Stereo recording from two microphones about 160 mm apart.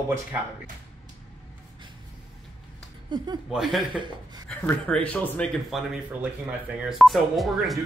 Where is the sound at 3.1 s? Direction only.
30° right (ahead or behind).